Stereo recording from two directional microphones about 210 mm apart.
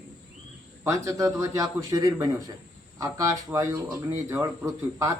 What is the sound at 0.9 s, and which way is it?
Speech, 15° right (ahead or behind).